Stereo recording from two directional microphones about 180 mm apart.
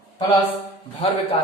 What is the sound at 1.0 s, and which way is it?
Speech, 30° left (ahead or behind).